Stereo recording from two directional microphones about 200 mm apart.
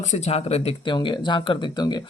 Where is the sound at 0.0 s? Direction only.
35° left (ahead or behind).